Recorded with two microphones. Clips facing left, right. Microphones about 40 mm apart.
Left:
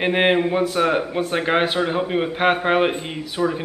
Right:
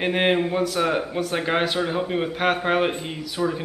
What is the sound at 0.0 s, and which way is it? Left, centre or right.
A man's voice, centre.